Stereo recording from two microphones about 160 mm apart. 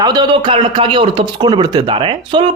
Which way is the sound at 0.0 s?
25° right (ahead or behind).